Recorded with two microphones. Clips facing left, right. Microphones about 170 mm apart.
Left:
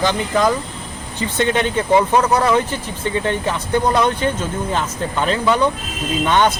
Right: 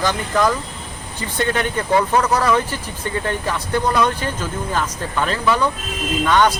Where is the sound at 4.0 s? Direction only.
25° left (ahead or behind).